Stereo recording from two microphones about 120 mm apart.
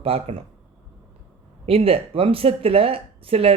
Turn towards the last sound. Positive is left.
turn(degrees=-55)  # may be behind; listen again after turning